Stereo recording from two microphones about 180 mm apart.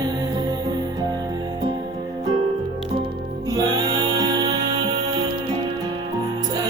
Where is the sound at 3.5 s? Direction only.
20° right (ahead or behind).